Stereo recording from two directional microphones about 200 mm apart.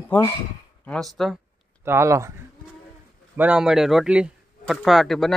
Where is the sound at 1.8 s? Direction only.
15° right (ahead or behind).